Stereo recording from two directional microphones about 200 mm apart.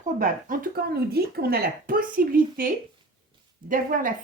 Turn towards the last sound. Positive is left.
turn(degrees=-40)  # may be behind; listen again after turning